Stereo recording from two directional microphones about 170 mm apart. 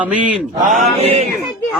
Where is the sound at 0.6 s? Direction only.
50° right (ahead or behind).